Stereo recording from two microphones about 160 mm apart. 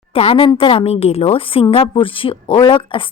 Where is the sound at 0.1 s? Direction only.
35° left (ahead or behind).